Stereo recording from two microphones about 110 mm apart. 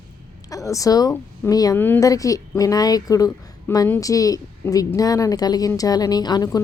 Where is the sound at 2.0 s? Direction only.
30° left (ahead or behind).